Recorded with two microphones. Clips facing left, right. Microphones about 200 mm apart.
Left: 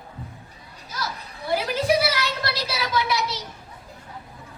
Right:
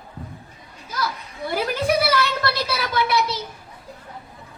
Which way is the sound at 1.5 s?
55° right (ahead or behind).